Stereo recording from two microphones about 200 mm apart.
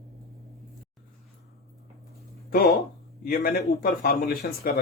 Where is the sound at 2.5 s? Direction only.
50° left (ahead or behind).